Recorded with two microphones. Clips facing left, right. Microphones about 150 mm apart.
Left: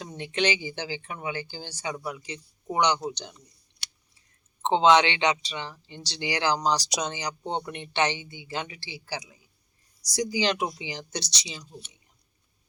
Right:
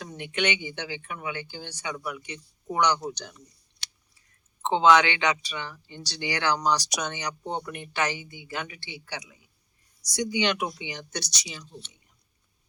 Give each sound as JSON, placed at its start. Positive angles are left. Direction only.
{"t": 0.0, "sound": "speech", "side_deg": 30}